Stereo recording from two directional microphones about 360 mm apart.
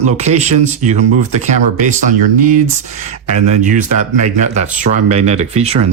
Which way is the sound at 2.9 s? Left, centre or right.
Centre.